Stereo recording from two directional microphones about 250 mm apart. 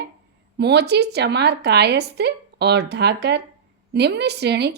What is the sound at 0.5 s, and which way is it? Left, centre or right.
A woman's voice, right.